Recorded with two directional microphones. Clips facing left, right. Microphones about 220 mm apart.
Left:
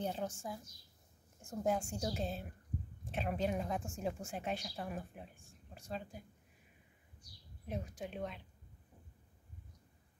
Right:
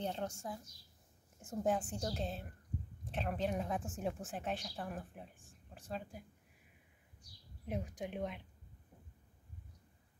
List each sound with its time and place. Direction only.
0.0 s a woman's voice: 5° left (ahead or behind)
7.6 s speech: 15° right (ahead or behind)